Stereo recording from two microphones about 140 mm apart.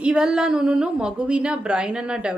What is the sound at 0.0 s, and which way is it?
A woman's voice, 5° right (ahead or behind).